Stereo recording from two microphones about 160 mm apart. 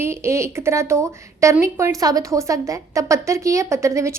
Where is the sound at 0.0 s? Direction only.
15° right (ahead or behind).